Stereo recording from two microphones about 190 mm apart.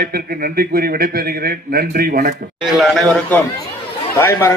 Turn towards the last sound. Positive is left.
turn(degrees=15)  # may be behind; listen again after turning